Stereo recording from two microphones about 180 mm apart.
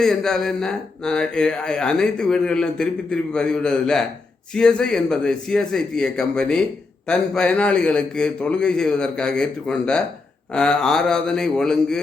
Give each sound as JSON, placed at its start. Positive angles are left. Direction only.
{"t": 0.0, "sound": "speech", "side_deg": 5}